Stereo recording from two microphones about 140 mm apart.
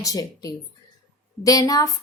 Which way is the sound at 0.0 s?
25° left (ahead or behind).